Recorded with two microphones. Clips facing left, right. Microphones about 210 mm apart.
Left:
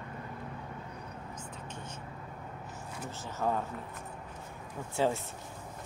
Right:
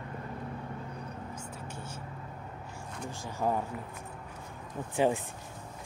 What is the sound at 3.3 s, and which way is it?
Speech, 15° right (ahead or behind).